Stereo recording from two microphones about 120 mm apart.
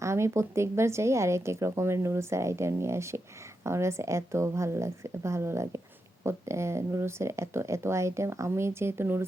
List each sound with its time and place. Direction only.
0.0 s a woman's voice: 25° right (ahead or behind)